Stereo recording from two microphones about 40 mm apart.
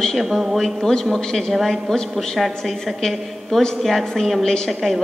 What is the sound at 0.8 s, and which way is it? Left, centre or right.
Speech, centre.